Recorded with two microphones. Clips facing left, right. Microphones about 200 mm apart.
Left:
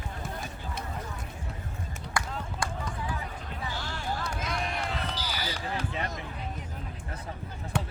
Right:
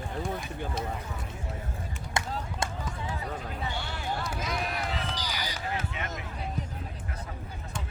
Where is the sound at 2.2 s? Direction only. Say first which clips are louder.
Right 1 dB; 25° right (ahead or behind).